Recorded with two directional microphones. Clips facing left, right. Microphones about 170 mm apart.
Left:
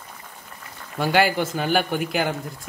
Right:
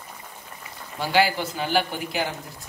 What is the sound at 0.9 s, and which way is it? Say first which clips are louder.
Speech: left 2 dB; 55° left (ahead or behind).